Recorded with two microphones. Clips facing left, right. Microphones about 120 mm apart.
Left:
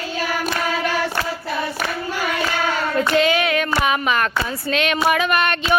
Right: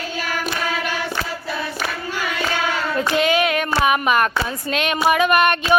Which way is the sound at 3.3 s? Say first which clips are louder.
Right 1 dB; 20° right (ahead or behind).